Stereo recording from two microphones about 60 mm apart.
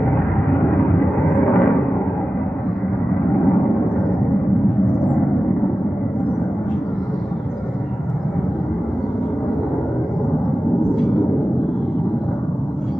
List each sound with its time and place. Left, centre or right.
1.2 s vehicle: left